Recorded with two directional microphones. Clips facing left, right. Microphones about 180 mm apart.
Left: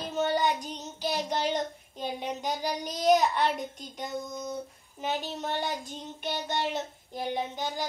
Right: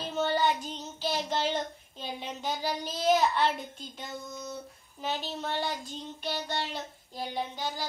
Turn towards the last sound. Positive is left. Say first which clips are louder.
# left 2 dB
turn(degrees=20)  # may be behind; listen again after turning